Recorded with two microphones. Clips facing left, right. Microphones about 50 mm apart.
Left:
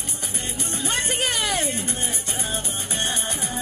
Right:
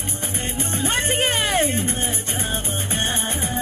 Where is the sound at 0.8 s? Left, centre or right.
Right.